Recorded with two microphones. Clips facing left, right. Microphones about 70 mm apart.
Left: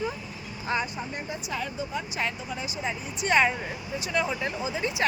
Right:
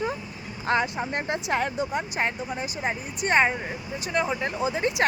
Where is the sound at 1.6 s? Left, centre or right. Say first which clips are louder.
Right 5 dB; right.